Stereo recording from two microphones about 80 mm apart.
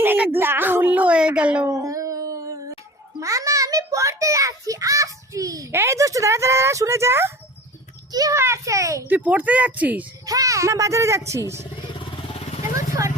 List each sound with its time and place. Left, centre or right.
0.0 s speech: right
1.8 s a sound: right
3.2 s a child's voice: right
8.1 s a child's voice: right
8.4 s speech: right
9.0 s speech: right
10.2 s speech: right
12.7 s vehicle: right